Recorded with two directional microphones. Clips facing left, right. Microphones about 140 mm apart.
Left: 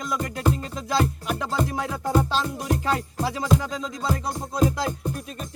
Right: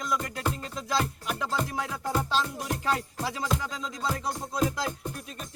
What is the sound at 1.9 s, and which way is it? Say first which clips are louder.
Music: left 5 dB; 40° left (ahead or behind).